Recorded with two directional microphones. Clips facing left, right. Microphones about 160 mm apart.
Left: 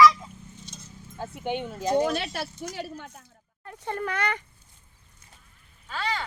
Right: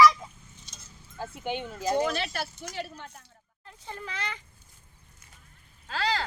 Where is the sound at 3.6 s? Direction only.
65° left (ahead or behind).